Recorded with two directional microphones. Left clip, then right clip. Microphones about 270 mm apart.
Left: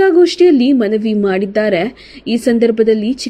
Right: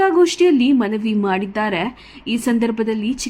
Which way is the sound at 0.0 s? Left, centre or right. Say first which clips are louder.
Left 5 dB; centre.